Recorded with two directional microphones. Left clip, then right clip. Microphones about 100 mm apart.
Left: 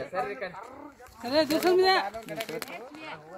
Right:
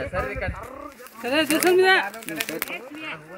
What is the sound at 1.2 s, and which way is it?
Speech, 45° left (ahead or behind).